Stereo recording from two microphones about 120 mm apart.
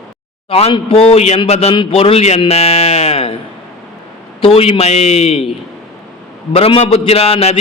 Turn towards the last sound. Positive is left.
turn(degrees=55)  # may be behind; listen again after turning